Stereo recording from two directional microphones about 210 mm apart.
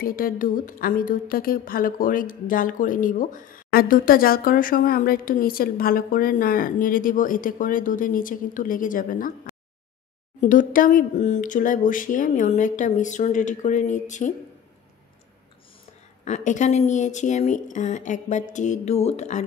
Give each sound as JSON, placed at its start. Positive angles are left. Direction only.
{"t": 0.0, "sound": "a woman's voice", "side_deg": 45}
{"t": 10.4, "sound": "a woman's voice", "side_deg": 40}
{"t": 16.3, "sound": "a woman's voice", "side_deg": 35}